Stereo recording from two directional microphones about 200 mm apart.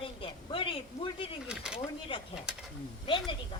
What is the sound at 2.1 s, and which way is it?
A woman's voice, 25° left (ahead or behind).